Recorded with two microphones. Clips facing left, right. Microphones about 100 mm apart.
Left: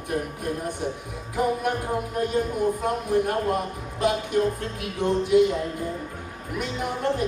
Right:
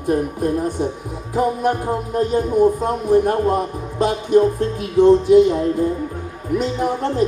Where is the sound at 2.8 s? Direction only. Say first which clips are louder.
Right 7 dB; 30° right (ahead or behind).